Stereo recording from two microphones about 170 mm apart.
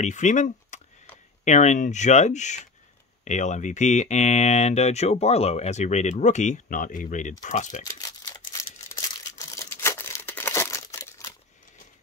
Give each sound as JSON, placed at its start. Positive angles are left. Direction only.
{"t": 0.0, "sound": "speech", "side_deg": 45}
{"t": 7.8, "sound": "a sound", "side_deg": 20}
{"t": 8.5, "sound": "crumpling", "side_deg": 20}